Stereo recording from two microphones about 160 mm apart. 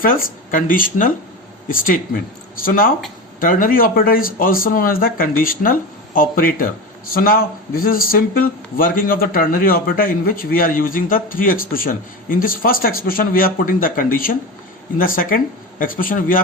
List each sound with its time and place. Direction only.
0.0 s speech: 60° left (ahead or behind)